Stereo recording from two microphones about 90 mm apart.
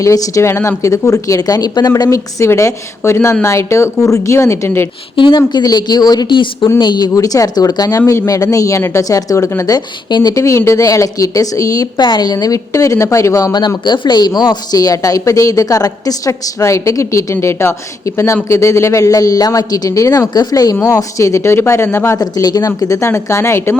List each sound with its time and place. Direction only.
0.0 s speech: 40° left (ahead or behind)
2.0 s speech: 30° left (ahead or behind)
5.1 s speech: 65° left (ahead or behind)
5.5 s speech: 45° left (ahead or behind); by 6.7 s 65° left (ahead or behind)
6.7 s speech: 50° left (ahead or behind)
7.1 s speech: 40° left (ahead or behind)
10.3 s speech: 35° left (ahead or behind)
13.5 s speech: 55° left (ahead or behind); by 22.2 s 30° left (ahead or behind)
22.2 s speech: 45° left (ahead or behind); by 23.7 s 30° left (ahead or behind)